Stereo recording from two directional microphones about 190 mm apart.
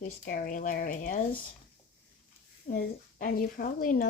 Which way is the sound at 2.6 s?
45° left (ahead or behind).